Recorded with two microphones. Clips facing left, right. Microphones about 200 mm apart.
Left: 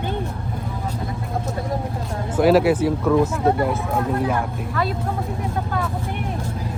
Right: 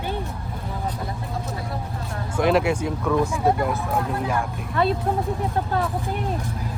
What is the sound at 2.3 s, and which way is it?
Speech, 5° left (ahead or behind).